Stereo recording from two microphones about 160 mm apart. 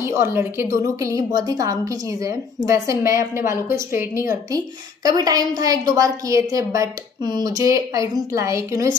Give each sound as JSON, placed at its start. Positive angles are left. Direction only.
{"t": 0.0, "sound": "a woman's voice", "side_deg": -15}